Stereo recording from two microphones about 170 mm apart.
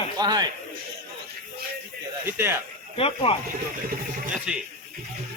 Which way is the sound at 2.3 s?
15° right (ahead or behind).